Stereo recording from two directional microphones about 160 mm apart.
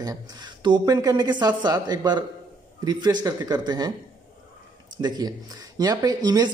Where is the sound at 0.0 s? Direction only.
25° right (ahead or behind).